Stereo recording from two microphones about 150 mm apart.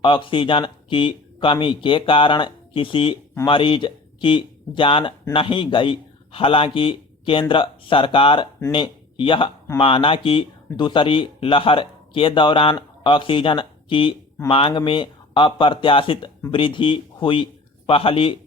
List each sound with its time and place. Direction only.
0.0 s a man's voice: 35° left (ahead or behind)